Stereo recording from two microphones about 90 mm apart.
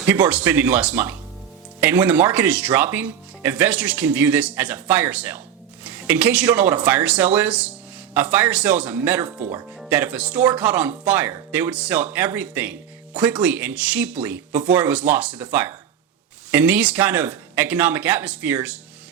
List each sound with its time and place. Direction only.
0.1 s speech: 15° right (ahead or behind)